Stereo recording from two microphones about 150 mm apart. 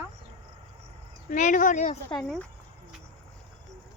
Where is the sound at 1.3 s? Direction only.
60° left (ahead or behind).